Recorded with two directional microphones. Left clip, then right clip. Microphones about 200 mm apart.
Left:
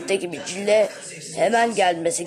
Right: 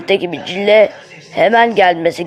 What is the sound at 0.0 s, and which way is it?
A woman's voice, 20° right (ahead or behind).